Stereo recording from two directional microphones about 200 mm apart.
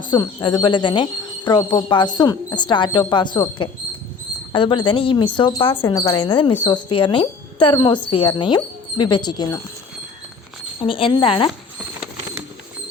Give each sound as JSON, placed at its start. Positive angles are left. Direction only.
{"t": 0.0, "sound": "speech", "side_deg": 20}
{"t": 10.8, "sound": "speech", "side_deg": 25}